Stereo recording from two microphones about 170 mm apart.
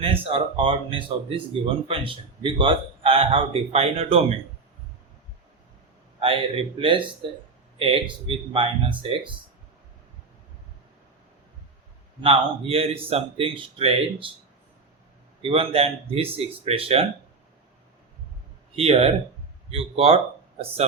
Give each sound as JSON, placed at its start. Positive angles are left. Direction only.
{"t": 0.0, "sound": "a man's voice", "side_deg": -35}
{"t": 6.1, "sound": "a man's voice", "side_deg": -30}
{"t": 12.2, "sound": "a man's voice", "side_deg": -35}
{"t": 15.4, "sound": "a man's voice", "side_deg": -35}
{"t": 18.8, "sound": "a man's voice", "side_deg": -35}